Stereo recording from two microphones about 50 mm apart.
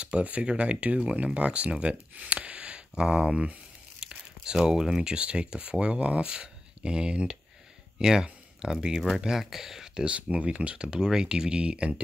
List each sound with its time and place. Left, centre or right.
0.0 s speech: right
8.0 s a sound: centre
8.8 s speech: centre
10.0 s speech: right